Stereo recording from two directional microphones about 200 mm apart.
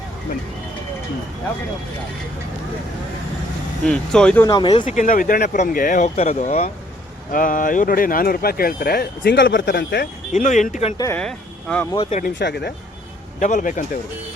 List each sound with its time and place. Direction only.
3.8 s speech: 5° left (ahead or behind)
4.4 s speech: 20° left (ahead or behind)
4.9 s speech: 40° left (ahead or behind)
10.3 s speech: 40° left (ahead or behind)
10.9 s speech: 15° left (ahead or behind)
11.2 s speech: 5° left (ahead or behind)
12.4 s speech: 55° left (ahead or behind)
13.4 s speech: 40° left (ahead or behind)